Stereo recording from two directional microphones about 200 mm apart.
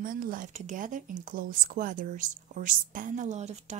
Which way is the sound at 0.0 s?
45° right (ahead or behind).